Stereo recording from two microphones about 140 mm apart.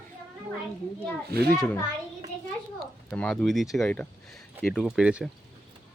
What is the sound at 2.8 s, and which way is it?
Speech, 10° left (ahead or behind).